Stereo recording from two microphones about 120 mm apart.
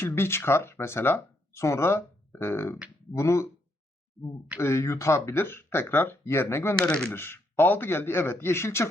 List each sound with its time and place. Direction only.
0.0 s speech: 20° left (ahead or behind)
4.6 s speech: 20° left (ahead or behind)
6.8 s speech: 10° left (ahead or behind)